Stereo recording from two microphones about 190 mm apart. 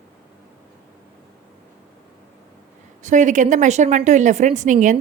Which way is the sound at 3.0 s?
40° right (ahead or behind).